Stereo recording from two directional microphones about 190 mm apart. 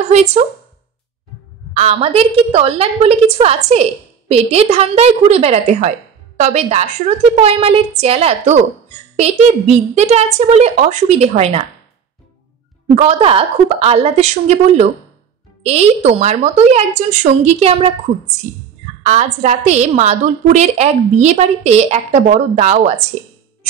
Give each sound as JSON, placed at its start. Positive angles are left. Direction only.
{"t": 0.0, "sound": "a woman's voice", "side_deg": -35}
{"t": 1.7, "sound": "a woman's voice", "side_deg": -35}
{"t": 12.9, "sound": "a woman's voice", "side_deg": -35}
{"t": 19.0, "sound": "a woman's voice", "side_deg": -40}